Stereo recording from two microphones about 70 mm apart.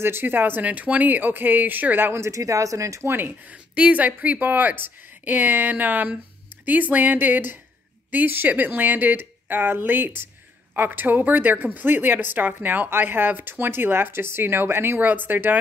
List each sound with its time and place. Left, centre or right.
0.0 s speech: right
3.1 s speech: right